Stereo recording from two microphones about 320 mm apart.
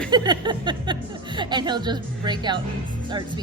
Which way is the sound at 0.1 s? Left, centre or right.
Centre.